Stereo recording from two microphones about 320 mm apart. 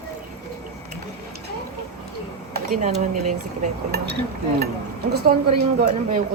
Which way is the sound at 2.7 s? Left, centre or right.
Right.